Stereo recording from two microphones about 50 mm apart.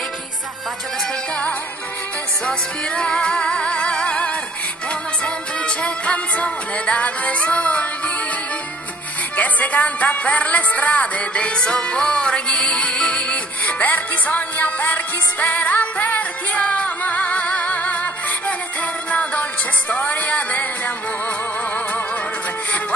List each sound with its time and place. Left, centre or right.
3.0 s music: centre
9.4 s music: left
13.7 s music: left
19.0 s music: left